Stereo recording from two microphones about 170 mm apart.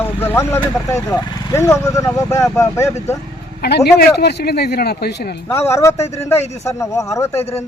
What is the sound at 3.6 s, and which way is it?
Speech, 70° left (ahead or behind).